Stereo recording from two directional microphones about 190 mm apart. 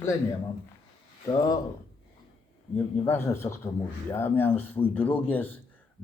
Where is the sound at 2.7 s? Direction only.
10° left (ahead or behind).